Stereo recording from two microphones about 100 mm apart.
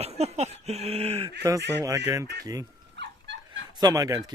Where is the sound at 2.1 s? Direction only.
35° right (ahead or behind).